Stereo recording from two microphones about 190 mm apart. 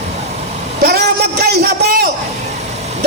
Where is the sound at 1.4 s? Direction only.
60° right (ahead or behind).